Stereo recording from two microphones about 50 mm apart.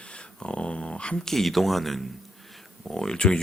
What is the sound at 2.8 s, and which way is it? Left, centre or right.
Speech, centre.